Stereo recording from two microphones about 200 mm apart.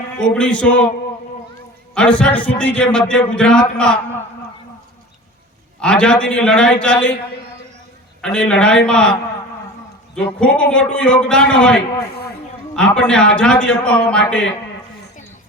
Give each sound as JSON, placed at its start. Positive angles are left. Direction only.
{"t": 0.2, "sound": "a man's voice", "side_deg": 5}
{"t": 2.0, "sound": "a man's voice", "side_deg": 5}
{"t": 5.8, "sound": "a man's voice", "side_deg": 5}
{"t": 8.2, "sound": "a man's voice", "side_deg": 5}
{"t": 10.2, "sound": "a man's voice", "side_deg": 5}